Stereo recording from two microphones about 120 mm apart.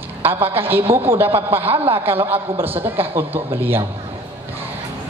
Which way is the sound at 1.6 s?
55° right (ahead or behind).